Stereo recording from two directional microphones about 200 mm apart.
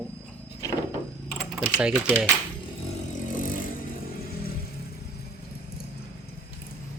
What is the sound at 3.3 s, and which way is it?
Vehicle, 45° left (ahead or behind).